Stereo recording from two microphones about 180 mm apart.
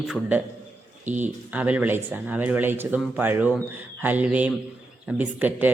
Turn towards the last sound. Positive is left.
turn(degrees=-10)  # may be behind; listen again after turning